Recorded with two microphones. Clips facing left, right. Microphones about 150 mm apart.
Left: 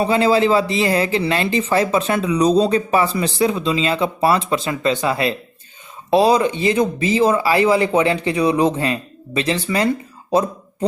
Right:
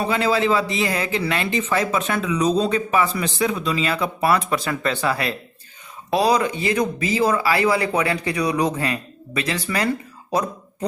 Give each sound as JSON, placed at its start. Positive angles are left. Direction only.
{"t": 0.0, "sound": "speech", "side_deg": 30}